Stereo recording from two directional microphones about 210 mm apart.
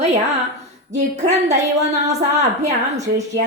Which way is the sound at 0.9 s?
35° right (ahead or behind).